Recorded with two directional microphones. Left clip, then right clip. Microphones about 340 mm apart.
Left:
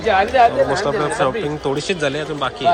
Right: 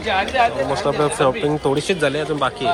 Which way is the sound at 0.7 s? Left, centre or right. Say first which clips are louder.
Even; centre.